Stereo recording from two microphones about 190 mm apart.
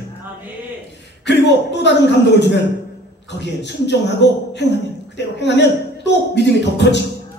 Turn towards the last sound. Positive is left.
turn(degrees=65)  # may be behind; listen again after turning